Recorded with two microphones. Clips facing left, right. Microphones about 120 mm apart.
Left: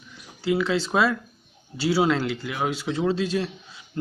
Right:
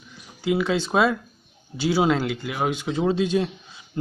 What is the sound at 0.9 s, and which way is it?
A man's voice, 5° right (ahead or behind).